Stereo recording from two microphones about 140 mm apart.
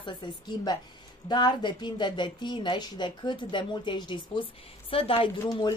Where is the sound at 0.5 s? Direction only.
30° left (ahead or behind).